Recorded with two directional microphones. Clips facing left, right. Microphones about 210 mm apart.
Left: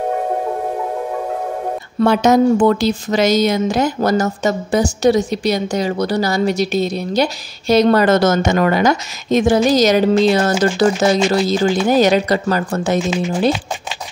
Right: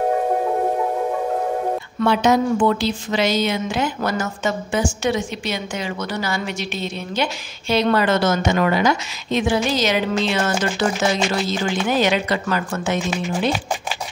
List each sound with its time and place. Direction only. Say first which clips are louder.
2.0 s speech: left 5 dB; 45° left (ahead or behind)